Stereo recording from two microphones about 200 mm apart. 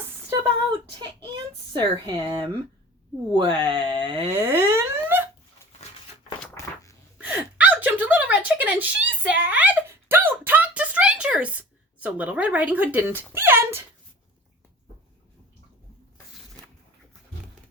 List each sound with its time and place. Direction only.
1.7 s speech: 20° right (ahead or behind)
4.4 s plop: 10° right (ahead or behind)
7.2 s gasp: 5° right (ahead or behind)